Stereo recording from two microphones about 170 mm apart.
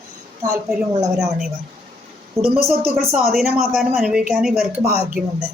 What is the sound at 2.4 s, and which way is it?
Speech, 15° right (ahead or behind).